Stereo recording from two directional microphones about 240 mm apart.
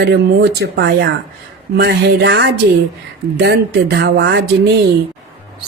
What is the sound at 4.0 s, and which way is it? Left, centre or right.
Speech, right.